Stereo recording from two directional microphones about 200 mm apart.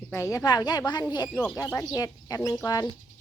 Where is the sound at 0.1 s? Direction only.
15° left (ahead or behind).